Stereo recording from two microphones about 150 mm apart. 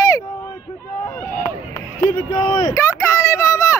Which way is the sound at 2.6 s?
20° left (ahead or behind).